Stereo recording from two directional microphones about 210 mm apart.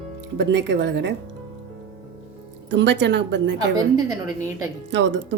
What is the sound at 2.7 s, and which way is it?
Speech, 55° right (ahead or behind).